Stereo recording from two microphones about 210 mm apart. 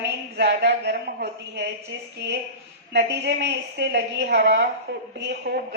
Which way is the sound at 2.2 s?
55° right (ahead or behind).